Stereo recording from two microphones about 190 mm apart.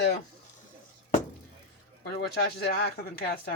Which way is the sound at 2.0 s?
60° left (ahead or behind).